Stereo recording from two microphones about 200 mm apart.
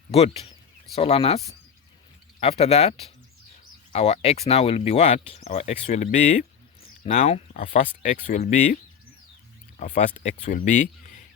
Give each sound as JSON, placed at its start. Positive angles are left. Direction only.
{"t": 0.9, "sound": "speech", "side_deg": 30}
{"t": 2.4, "sound": "speech", "side_deg": 30}